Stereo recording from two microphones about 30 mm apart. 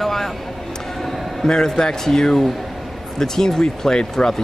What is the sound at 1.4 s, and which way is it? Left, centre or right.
Speech, centre.